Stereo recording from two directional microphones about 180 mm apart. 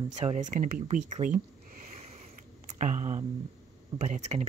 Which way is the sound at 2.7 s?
45° right (ahead or behind).